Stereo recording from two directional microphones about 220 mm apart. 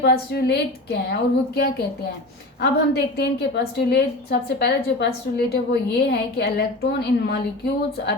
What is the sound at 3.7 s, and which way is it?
A woman's voice, 45° left (ahead or behind).